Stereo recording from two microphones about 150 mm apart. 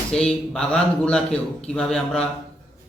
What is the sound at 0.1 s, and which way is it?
A man's voice, 5° left (ahead or behind).